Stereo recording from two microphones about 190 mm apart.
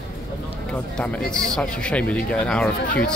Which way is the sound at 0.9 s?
5° left (ahead or behind).